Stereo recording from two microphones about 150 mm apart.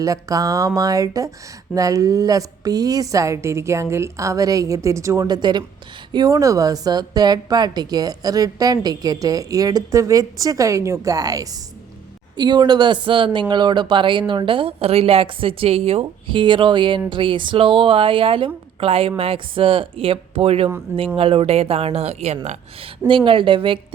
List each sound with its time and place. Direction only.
0.0 s a woman's voice: 25° right (ahead or behind); by 22.4 s 45° right (ahead or behind)
23.0 s speech: 35° right (ahead or behind)